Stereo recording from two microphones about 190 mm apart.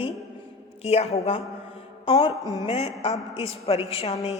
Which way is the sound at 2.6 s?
30° left (ahead or behind).